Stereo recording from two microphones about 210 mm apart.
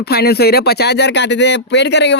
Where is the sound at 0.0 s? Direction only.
50° left (ahead or behind).